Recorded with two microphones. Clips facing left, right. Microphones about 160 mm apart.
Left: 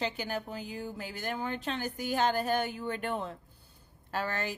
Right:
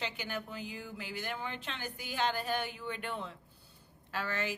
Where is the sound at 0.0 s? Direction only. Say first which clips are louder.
Left 5 dB; 40° left (ahead or behind).